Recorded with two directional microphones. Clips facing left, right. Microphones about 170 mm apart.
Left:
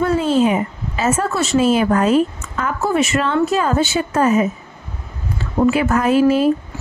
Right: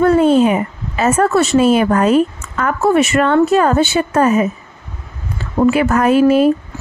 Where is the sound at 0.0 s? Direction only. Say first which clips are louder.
Right 5 dB; 55° right (ahead or behind).